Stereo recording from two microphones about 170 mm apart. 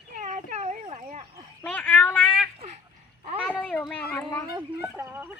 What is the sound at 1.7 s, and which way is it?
Telephone, 10° left (ahead or behind).